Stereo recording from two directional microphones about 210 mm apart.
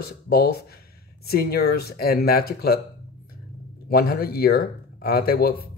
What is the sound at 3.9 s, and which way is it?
Speech, 45° left (ahead or behind).